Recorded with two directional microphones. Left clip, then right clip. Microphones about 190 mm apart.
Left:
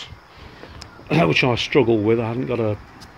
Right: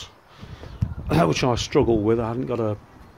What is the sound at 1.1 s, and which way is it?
Speech, 10° right (ahead or behind).